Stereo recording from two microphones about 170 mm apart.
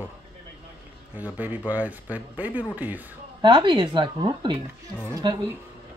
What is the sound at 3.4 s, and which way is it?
A woman's voice, 25° right (ahead or behind).